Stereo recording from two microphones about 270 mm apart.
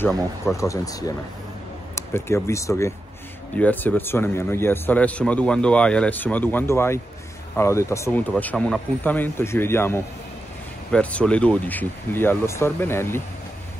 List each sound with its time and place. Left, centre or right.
0.6 s a man's voice: centre